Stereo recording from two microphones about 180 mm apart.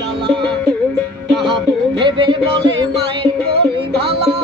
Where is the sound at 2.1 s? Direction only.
25° right (ahead or behind).